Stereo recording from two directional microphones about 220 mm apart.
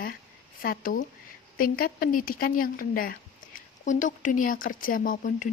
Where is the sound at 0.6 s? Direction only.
40° left (ahead or behind).